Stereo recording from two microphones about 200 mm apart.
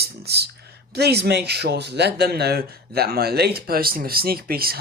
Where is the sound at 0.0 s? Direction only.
55° right (ahead or behind).